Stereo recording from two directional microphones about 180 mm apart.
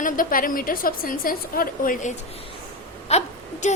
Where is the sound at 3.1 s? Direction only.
35° left (ahead or behind).